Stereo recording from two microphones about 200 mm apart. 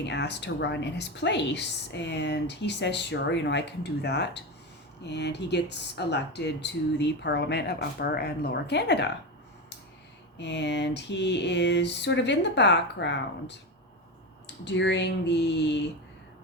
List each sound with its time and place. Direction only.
0.0 s a woman's voice: 60° left (ahead or behind)
10.3 s a woman's voice: 60° left (ahead or behind)
14.4 s a woman's voice: 60° left (ahead or behind)